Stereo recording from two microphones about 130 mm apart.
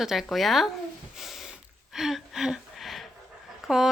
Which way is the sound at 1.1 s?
Centre (ahead or behind).